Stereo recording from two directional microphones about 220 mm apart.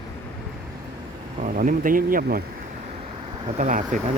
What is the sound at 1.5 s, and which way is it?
Speech, 40° right (ahead or behind).